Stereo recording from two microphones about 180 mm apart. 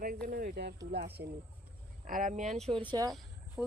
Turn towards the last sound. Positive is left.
turn(degrees=0)  # may be behind; listen again after turning